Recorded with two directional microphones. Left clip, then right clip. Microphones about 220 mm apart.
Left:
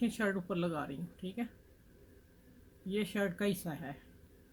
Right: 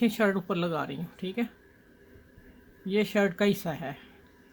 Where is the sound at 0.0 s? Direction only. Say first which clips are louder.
Right 9 dB; 50° right (ahead or behind).